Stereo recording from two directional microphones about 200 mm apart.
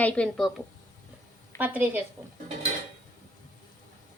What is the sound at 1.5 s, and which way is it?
Speech, 10° right (ahead or behind).